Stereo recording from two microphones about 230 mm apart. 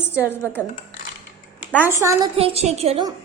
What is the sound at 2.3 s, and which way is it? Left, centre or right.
Speech, right.